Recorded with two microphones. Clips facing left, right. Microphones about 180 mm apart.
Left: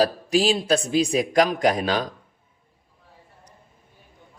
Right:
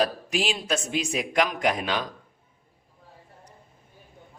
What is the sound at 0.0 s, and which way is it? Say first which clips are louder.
Speech: left 6 dB; 35° left (ahead or behind).